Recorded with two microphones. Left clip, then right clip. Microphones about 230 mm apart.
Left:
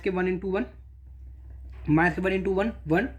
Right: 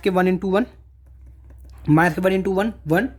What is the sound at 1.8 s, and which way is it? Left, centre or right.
Speech, right.